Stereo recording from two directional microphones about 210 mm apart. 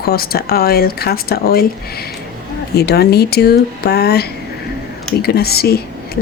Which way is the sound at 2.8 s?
50° left (ahead or behind).